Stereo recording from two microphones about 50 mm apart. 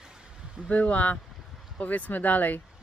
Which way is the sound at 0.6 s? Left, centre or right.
Left.